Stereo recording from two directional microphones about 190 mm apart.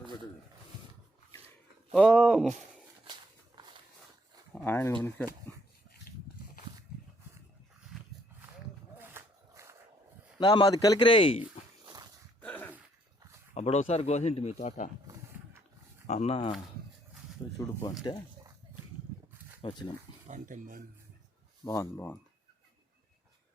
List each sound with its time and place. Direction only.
1.9 s speech: centre (ahead or behind)
3.0 s walk: 25° right (ahead or behind)
4.5 s speech: 10° left (ahead or behind)
9.0 s a sound: 15° right (ahead or behind)
10.4 s speech: 25° left (ahead or behind)
11.9 s dog: 20° right (ahead or behind)
12.4 s dog: 10° left (ahead or behind)
13.5 s speech: 35° left (ahead or behind)
16.0 s speech: 35° left (ahead or behind)
17.6 s speech: 15° left (ahead or behind)
19.6 s speech: 30° left (ahead or behind)
20.2 s speech: 40° right (ahead or behind)
21.6 s speech: 15° left (ahead or behind)